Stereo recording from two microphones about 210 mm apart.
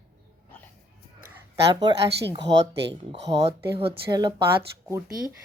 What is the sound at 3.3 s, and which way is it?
Speech, 25° right (ahead or behind).